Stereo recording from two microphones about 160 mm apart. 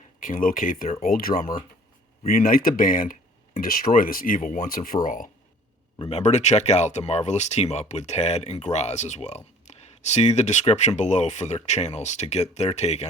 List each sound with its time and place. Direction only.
0.2 s speech: 55° left (ahead or behind)
6.1 s speech: 45° left (ahead or behind)